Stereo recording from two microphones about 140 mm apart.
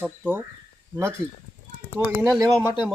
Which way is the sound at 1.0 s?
20° right (ahead or behind).